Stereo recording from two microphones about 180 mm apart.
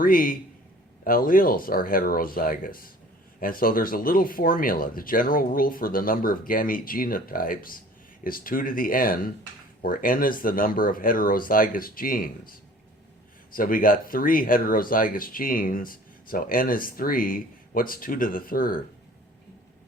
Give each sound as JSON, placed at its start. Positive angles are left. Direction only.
{"t": 0.0, "sound": "speech", "side_deg": 50}